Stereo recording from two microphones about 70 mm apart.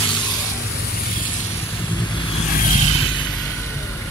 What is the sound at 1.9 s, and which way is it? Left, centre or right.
Vehicle, left.